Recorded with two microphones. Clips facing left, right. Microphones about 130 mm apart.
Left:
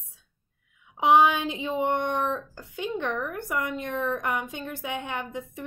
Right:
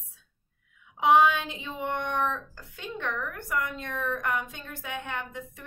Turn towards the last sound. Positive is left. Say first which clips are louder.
# left 3 dB
turn(degrees=15)  # may be behind; listen again after turning